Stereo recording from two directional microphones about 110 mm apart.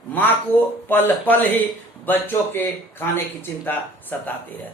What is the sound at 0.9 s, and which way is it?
Speech, 15° left (ahead or behind).